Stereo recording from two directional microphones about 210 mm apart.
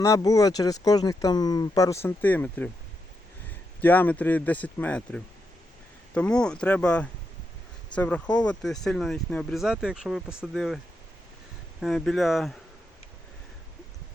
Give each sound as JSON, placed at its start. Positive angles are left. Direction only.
{"t": 0.0, "sound": "speech", "side_deg": 15}
{"t": 3.8, "sound": "speech", "side_deg": 10}
{"t": 11.8, "sound": "speech", "side_deg": 0}